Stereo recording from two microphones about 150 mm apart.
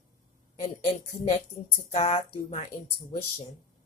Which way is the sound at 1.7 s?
40° left (ahead or behind).